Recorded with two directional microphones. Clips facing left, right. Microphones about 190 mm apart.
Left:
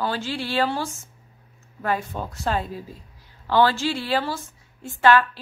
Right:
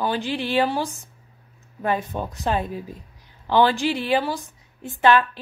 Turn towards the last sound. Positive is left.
turn(degrees=-20)  # may be behind; listen again after turning